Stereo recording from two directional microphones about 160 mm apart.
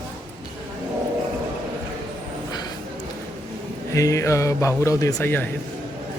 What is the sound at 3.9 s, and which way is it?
Speech, 20° left (ahead or behind).